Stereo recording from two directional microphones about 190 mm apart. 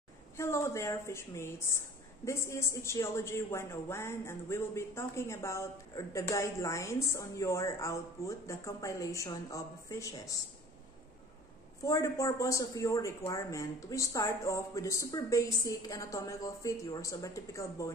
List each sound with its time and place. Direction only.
0.4 s a woman's voice: 15° left (ahead or behind)
11.8 s speech: 15° left (ahead or behind)